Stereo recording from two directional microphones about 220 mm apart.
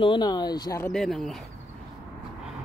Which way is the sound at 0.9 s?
Centre (ahead or behind).